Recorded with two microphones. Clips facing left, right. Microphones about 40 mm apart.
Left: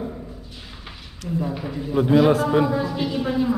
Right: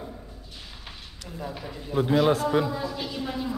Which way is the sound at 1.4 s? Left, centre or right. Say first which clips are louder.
Left 3 dB; centre.